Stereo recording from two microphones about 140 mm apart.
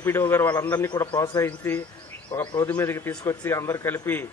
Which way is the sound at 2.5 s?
25° left (ahead or behind).